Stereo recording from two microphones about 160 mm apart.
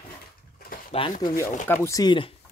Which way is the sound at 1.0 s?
35° left (ahead or behind).